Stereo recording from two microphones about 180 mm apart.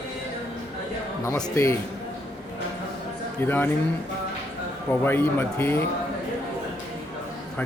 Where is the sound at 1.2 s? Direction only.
15° left (ahead or behind).